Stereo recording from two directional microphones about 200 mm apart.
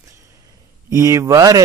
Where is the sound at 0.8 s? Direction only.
15° right (ahead or behind).